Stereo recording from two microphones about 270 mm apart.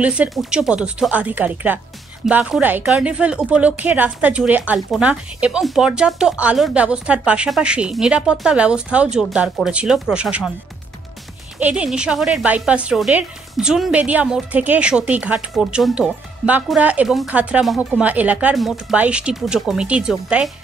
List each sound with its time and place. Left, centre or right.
0.0 s a woman's voice: centre
11.6 s a woman's voice: centre